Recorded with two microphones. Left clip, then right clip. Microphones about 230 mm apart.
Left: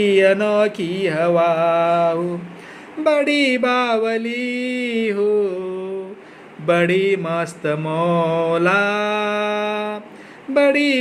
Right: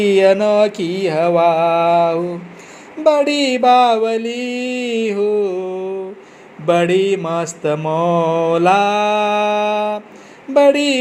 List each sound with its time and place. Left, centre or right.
0.0 s mantra: centre
6.7 s mantra: centre